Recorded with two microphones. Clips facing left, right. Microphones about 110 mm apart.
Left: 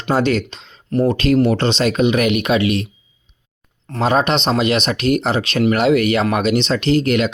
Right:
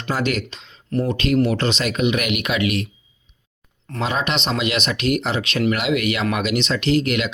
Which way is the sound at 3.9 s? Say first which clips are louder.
Left 7 dB; 40° left (ahead or behind).